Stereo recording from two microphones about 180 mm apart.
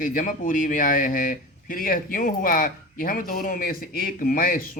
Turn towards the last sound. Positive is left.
turn(degrees=55)  # may be behind; listen again after turning